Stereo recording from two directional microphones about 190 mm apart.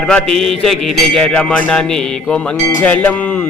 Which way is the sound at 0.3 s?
Centre (ahead or behind).